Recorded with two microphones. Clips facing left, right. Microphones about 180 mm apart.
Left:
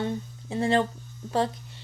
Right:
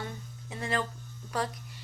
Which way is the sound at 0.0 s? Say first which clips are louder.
Left 10 dB; 30° left (ahead or behind).